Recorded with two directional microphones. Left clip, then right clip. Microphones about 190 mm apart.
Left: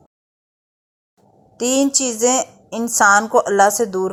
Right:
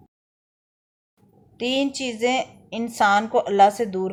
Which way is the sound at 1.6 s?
55° left (ahead or behind).